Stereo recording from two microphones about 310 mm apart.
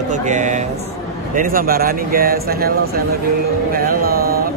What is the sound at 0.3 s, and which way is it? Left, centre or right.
Speech, right.